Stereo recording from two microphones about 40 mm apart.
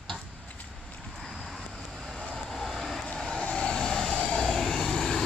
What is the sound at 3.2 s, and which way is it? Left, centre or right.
Vehicle, centre.